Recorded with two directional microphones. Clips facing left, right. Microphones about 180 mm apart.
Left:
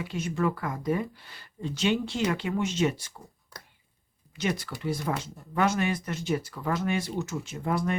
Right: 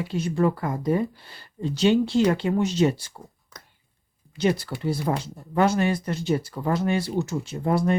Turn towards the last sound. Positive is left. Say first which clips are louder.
# right 6 dB
turn(degrees=-35)  # may be behind; listen again after turning